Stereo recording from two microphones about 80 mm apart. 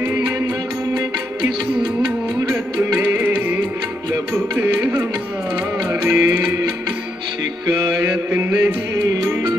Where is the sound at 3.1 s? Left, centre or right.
Right.